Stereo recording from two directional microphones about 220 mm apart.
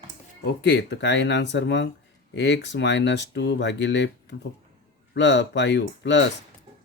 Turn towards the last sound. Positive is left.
turn(degrees=55)  # may be behind; listen again after turning